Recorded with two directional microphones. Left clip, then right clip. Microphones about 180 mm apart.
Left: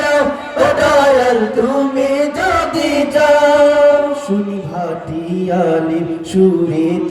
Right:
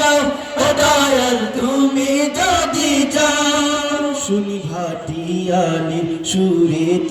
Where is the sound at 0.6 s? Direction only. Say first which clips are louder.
Left 4 dB; 55° left (ahead or behind).